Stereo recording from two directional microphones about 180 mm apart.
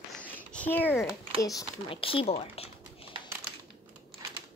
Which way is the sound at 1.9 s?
30° left (ahead or behind).